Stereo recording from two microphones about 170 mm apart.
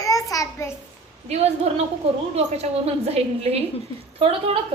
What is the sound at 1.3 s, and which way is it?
A woman's voice, 40° right (ahead or behind).